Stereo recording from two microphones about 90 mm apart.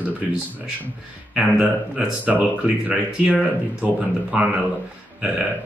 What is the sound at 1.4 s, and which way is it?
A man's voice, 10° right (ahead or behind).